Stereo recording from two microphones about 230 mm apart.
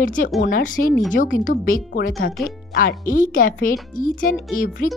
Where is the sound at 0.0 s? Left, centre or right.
Left.